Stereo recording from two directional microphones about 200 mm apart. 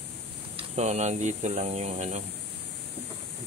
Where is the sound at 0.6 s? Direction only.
35° right (ahead or behind).